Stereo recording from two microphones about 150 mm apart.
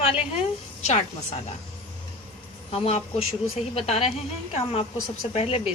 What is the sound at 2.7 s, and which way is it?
A woman's voice, 40° left (ahead or behind).